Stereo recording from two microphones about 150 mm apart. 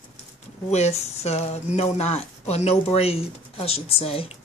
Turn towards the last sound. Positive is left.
turn(degrees=40)  # may be behind; listen again after turning